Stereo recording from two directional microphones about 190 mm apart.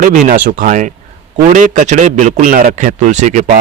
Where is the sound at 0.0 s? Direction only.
45° right (ahead or behind).